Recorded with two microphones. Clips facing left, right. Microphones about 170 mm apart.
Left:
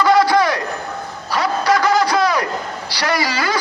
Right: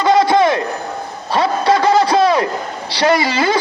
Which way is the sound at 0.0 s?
25° right (ahead or behind).